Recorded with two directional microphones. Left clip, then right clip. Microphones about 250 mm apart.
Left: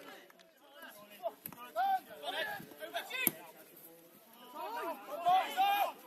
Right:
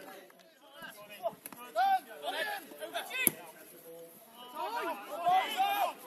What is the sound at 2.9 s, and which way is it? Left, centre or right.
Chop, centre.